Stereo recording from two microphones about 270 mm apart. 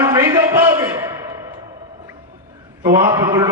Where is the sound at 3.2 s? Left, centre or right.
Centre.